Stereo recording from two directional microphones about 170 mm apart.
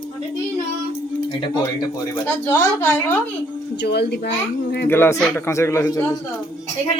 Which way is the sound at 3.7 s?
75° left (ahead or behind).